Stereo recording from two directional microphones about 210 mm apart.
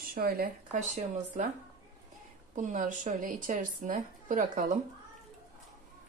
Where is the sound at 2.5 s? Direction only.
35° right (ahead or behind).